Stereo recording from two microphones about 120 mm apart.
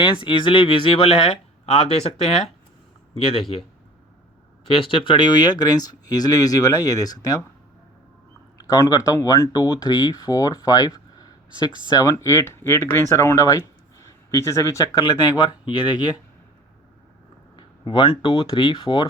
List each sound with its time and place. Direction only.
0.0 s speech: 40° left (ahead or behind); by 2.4 s 60° left (ahead or behind)
4.7 s speech: 50° left (ahead or behind); by 7.3 s 30° left (ahead or behind)
8.7 s speech: 30° left (ahead or behind)
17.6 s a sound: 40° left (ahead or behind)
18.2 s speech: 45° left (ahead or behind)